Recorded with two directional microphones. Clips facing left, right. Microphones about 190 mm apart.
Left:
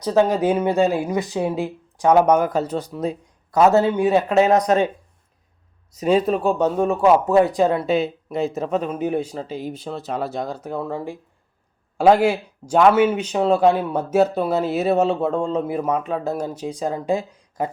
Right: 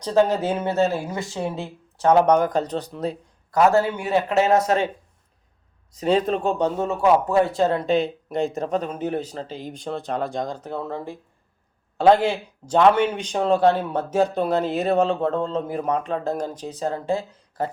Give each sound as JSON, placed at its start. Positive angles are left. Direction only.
{"t": 0.0, "sound": "speech", "side_deg": 10}
{"t": 3.5, "sound": "speech", "side_deg": 20}
{"t": 6.0, "sound": "speech", "side_deg": 10}